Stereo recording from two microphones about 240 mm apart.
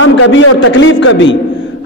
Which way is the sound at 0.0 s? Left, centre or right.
Left.